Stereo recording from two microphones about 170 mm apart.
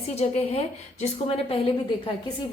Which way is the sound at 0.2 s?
40° left (ahead or behind).